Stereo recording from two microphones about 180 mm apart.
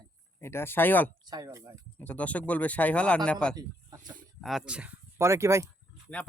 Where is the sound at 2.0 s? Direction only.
10° left (ahead or behind).